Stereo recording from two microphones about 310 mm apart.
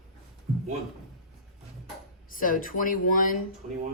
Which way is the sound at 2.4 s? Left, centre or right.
Left.